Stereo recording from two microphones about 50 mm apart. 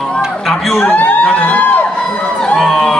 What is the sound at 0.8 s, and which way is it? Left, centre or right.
Speech, left.